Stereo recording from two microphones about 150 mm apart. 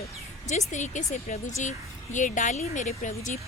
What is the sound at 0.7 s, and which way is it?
Speech, 55° left (ahead or behind).